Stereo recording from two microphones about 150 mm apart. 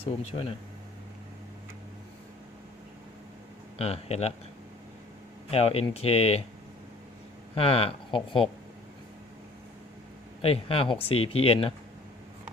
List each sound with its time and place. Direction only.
0.0 s speech: 40° left (ahead or behind)
3.8 s speech: 40° left (ahead or behind)
5.5 s speech: 40° left (ahead or behind)
7.5 s speech: 40° left (ahead or behind)
10.4 s speech: 40° left (ahead or behind)